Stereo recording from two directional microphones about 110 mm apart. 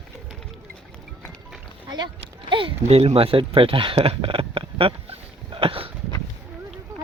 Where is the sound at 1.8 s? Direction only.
45° right (ahead or behind).